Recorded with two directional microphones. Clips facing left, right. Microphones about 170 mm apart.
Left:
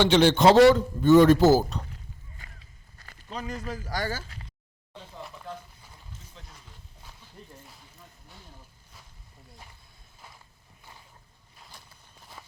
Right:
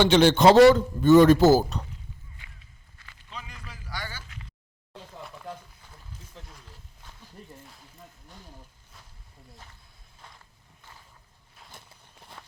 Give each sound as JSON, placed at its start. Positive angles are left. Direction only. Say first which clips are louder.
{"t": 0.0, "sound": "a man's voice", "louder": "right 1 dB", "side_deg": -45}
{"t": 2.4, "sound": "walk", "louder": "left 3 dB", "side_deg": 40}
{"t": 3.0, "sound": "speech", "louder": "left 7 dB", "side_deg": 40}
{"t": 10.2, "sound": "walk", "louder": "even", "side_deg": 5}